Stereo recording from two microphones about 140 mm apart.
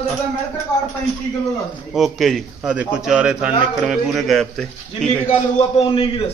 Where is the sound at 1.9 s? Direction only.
Centre (ahead or behind).